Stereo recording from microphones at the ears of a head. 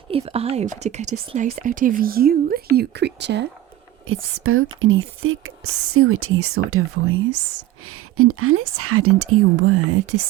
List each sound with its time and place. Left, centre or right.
0.1 s speech: right